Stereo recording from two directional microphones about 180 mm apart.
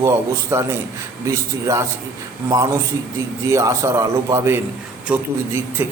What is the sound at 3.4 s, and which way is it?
A man's voice, 15° right (ahead or behind).